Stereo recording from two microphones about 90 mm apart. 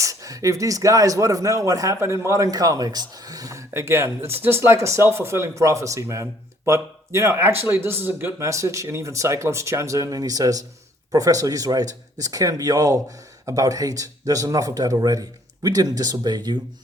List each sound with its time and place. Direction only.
0.0 s a man's voice: 40° right (ahead or behind)